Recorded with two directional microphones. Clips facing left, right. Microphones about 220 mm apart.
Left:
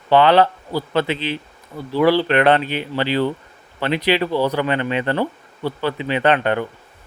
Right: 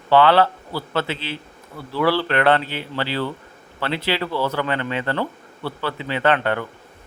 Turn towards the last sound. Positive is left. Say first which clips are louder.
# left 3 dB
turn(degrees=20)  # may be behind; listen again after turning